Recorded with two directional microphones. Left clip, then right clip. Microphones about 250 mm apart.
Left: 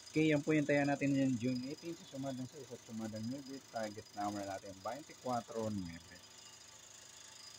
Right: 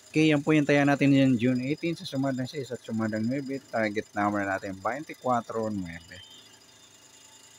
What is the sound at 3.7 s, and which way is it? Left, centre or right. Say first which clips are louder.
Speech: right 14 dB; right.